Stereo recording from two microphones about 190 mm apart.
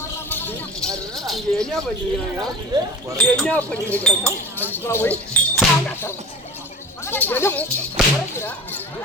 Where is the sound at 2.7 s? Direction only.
20° right (ahead or behind).